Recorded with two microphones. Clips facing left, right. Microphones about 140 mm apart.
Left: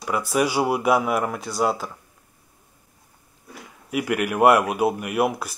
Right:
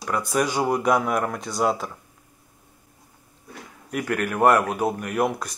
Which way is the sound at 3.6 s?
10° left (ahead or behind).